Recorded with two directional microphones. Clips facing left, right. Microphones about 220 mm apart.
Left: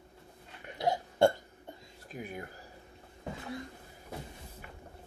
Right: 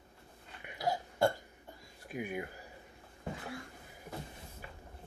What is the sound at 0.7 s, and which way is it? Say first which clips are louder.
Burping: left 5 dB; 25° left (ahead or behind).